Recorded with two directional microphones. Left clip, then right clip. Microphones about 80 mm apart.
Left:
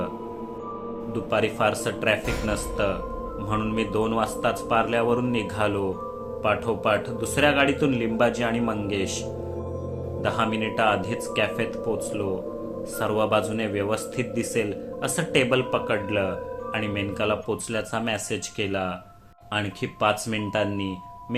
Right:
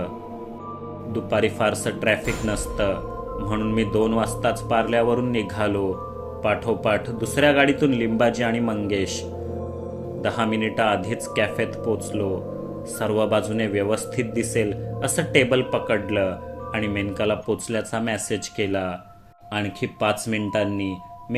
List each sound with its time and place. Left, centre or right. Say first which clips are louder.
1.1 s a man's voice: right 3 dB; right
10.2 s a man's voice: right 2 dB; right